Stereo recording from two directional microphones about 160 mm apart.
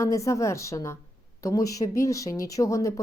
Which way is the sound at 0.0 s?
20° left (ahead or behind).